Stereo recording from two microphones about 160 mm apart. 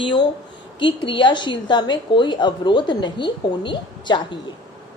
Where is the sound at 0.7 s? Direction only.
30° left (ahead or behind).